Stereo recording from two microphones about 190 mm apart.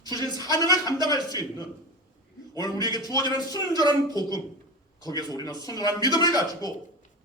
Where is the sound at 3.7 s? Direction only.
20° right (ahead or behind).